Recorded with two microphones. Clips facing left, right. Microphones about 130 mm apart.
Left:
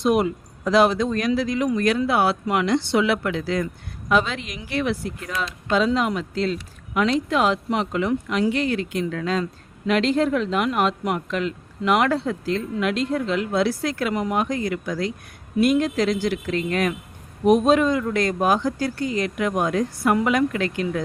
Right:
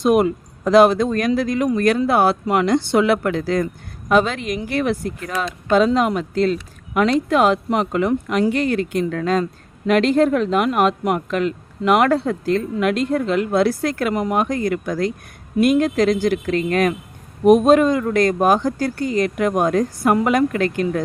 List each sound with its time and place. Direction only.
0.0 s speech: 50° right (ahead or behind)